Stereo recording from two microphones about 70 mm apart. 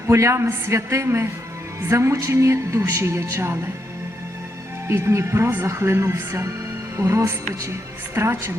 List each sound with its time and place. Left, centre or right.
0.1 s a man's voice: right
4.9 s a man's voice: right